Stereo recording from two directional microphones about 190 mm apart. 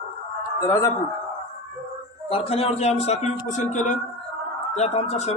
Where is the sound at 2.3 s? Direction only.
30° left (ahead or behind).